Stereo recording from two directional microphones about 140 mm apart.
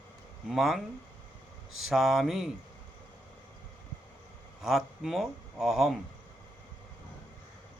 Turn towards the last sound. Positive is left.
turn(degrees=0)  # may be behind; listen again after turning